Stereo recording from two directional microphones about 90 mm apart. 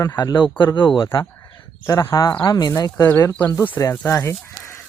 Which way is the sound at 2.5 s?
45° left (ahead or behind).